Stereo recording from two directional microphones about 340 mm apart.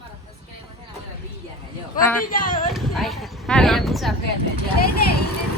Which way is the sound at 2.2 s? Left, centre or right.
Left.